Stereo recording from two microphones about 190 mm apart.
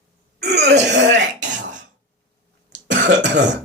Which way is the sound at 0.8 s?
65° right (ahead or behind).